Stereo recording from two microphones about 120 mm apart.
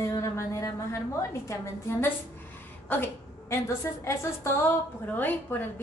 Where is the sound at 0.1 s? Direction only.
25° left (ahead or behind).